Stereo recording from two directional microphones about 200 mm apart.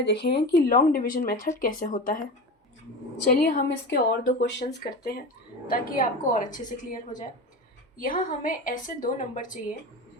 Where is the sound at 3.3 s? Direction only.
45° left (ahead or behind).